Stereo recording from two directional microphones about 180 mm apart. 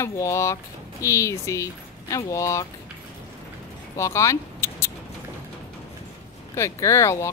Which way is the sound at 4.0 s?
15° left (ahead or behind).